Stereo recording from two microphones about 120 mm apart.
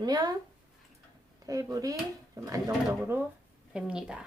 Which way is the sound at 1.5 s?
30° right (ahead or behind).